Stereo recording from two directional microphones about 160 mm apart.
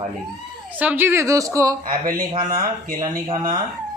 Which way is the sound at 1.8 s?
60° right (ahead or behind).